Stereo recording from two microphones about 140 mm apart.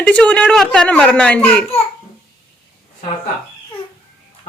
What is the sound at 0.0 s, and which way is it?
A woman's voice, 10° left (ahead or behind).